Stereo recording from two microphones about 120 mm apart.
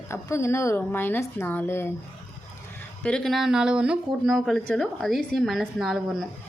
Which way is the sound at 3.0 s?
5° left (ahead or behind).